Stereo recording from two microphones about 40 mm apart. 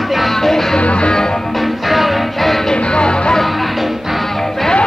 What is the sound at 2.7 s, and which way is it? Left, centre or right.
Music, left.